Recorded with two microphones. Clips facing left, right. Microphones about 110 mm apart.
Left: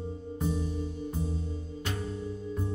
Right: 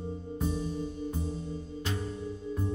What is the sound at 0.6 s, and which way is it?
Music, 20° right (ahead or behind).